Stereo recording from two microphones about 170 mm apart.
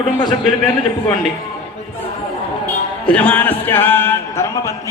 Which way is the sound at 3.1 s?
10° left (ahead or behind).